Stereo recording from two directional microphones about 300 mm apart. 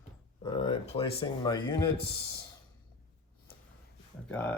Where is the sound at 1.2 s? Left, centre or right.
Centre.